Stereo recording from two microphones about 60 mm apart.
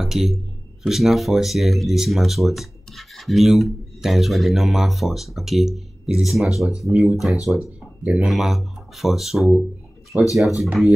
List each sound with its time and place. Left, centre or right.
0.0 s speech: centre
8.0 s speech: centre
8.3 s speech: centre
10.1 s speech: right
10.6 s speech: centre